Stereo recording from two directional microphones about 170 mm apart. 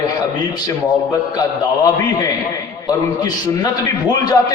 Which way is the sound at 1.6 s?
25° left (ahead or behind).